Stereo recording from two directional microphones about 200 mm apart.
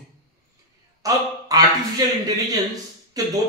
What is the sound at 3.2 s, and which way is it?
Speech, 15° right (ahead or behind).